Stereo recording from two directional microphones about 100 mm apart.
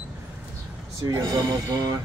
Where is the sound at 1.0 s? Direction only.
40° right (ahead or behind).